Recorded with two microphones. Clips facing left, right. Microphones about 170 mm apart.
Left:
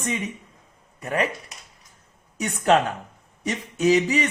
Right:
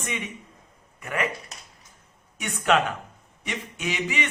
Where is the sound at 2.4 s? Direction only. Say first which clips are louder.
Left 3 dB; 35° left (ahead or behind).